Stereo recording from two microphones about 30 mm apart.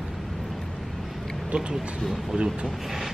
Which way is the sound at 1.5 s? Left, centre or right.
Right.